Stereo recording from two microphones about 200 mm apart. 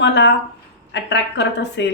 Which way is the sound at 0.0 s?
60° left (ahead or behind).